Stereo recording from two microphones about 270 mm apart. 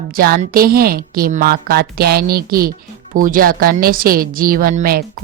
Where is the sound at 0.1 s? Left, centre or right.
Right.